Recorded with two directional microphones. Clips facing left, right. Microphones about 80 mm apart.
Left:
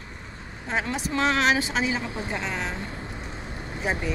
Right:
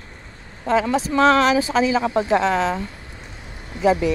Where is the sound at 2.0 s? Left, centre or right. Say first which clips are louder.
Right 12 dB; right.